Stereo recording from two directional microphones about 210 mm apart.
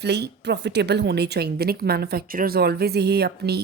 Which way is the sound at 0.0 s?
50° right (ahead or behind).